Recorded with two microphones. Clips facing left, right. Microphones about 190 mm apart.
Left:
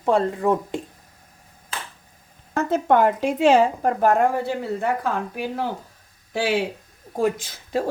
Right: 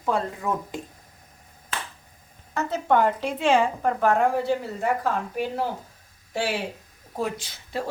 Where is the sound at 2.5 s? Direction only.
55° left (ahead or behind).